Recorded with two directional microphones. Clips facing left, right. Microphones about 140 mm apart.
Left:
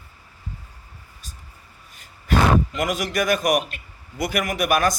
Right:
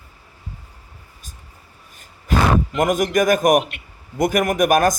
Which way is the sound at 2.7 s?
50° right (ahead or behind).